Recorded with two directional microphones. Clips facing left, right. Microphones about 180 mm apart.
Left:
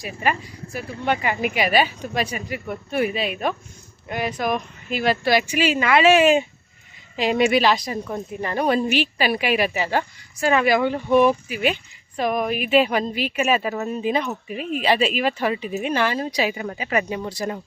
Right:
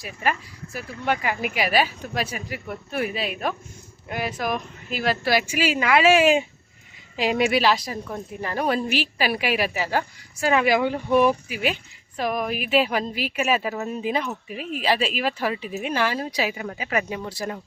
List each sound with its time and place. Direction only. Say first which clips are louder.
0.0 s a woman's voice: left 2 dB; centre (ahead or behind)